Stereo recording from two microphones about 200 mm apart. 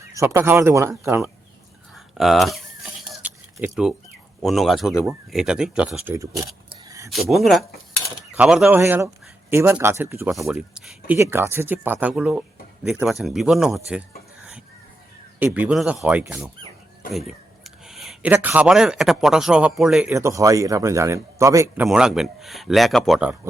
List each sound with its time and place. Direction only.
0.1 s speech: 15° right (ahead or behind)
2.0 s speech: centre (ahead or behind)
3.0 s a sound: 5° right (ahead or behind)
4.4 s speech: centre (ahead or behind)
6.1 s a sound: 15° right (ahead or behind)
7.1 s speech: centre (ahead or behind)
8.8 s speech: 15° right (ahead or behind)
10.5 s speech: 5° right (ahead or behind)
15.4 s speech: 5° right (ahead or behind)
17.1 s speech: centre (ahead or behind)
20.1 s speech: 15° right (ahead or behind)
21.8 s speech: 5° right (ahead or behind)